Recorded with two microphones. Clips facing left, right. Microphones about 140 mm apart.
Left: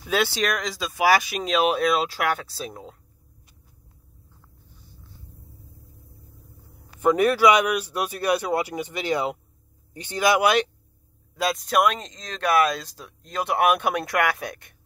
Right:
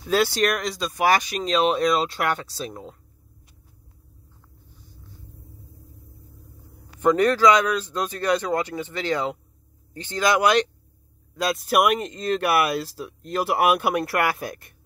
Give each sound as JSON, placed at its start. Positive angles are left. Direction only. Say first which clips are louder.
{"t": 0.1, "sound": "speech", "louder": "right 3 dB", "side_deg": 0}
{"t": 7.0, "sound": "speech", "louder": "even", "side_deg": 10}